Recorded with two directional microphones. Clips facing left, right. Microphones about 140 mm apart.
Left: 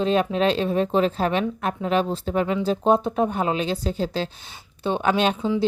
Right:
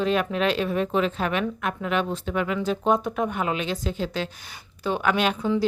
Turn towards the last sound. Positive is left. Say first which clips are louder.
# left 2 dB
turn(degrees=30)  # may be behind; listen again after turning